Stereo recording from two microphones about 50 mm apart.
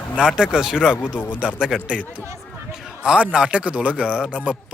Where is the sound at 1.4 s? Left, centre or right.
Centre.